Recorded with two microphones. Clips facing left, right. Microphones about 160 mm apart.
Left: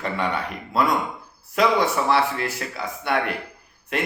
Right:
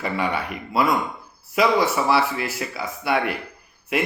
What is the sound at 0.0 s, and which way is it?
A man's voice, 5° right (ahead or behind).